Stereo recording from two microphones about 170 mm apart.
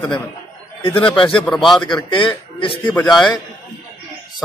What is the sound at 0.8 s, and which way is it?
A man's voice, 10° left (ahead or behind).